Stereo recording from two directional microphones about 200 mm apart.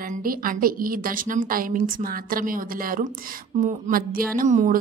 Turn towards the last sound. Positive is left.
turn(degrees=-40)  # may be behind; listen again after turning